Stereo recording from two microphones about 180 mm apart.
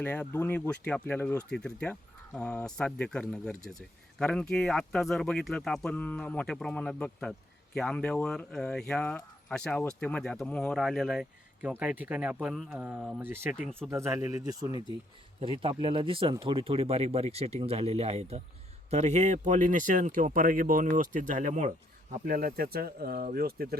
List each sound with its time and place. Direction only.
0.0 s speech: 10° left (ahead or behind); by 23.6 s 55° right (ahead or behind)